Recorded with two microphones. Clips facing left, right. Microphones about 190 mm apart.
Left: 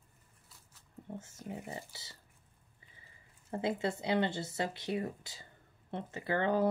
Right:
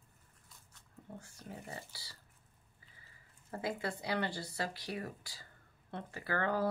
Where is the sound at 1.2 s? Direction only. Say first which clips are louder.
Left 5 dB; 20° left (ahead or behind).